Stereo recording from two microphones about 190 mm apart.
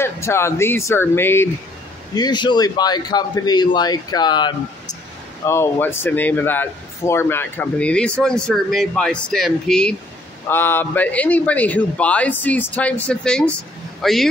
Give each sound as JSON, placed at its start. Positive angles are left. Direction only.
{"t": 0.0, "sound": "speech", "side_deg": 15}
{"t": 2.1, "sound": "a man's voice", "side_deg": 20}